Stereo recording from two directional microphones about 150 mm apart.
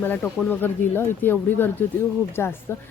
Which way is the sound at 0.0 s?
10° left (ahead or behind).